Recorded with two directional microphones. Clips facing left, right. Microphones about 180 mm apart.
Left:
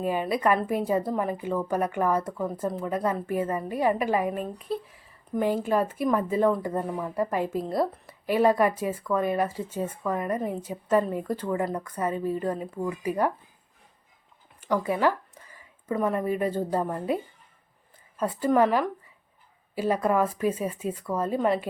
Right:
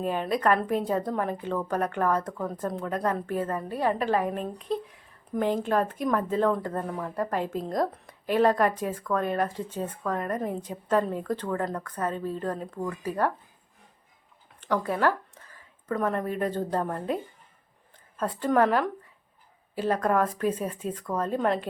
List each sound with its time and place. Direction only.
0.0 s a woman's voice: 10° left (ahead or behind)
14.6 s speech: 10° left (ahead or behind)
18.2 s a woman's voice: 10° left (ahead or behind)